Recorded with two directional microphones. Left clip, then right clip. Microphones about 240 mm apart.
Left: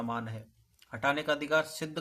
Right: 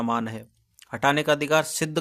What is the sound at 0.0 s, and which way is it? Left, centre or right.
Speech, right.